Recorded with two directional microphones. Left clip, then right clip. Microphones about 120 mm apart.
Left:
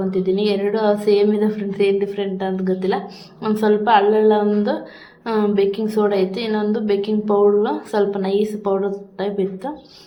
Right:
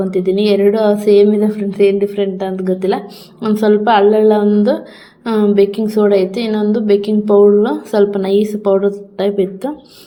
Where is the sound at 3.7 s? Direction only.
45° right (ahead or behind).